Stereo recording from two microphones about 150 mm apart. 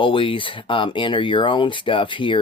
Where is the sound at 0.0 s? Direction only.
35° left (ahead or behind).